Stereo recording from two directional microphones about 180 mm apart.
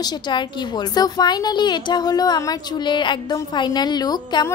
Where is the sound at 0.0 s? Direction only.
25° left (ahead or behind).